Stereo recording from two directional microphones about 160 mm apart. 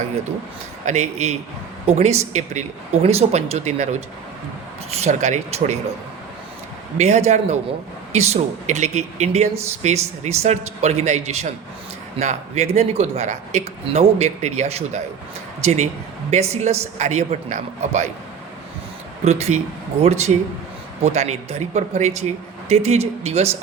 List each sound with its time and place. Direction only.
0.9 s speech: 45° right (ahead or behind)
4.9 s speech: 45° right (ahead or behind)
7.0 s speech: 45° right (ahead or behind)
19.2 s speech: 45° right (ahead or behind)